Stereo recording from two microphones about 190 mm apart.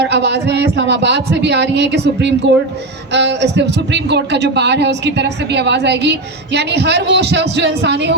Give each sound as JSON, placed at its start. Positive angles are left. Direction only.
{"t": 0.0, "sound": "a man's voice", "side_deg": -65}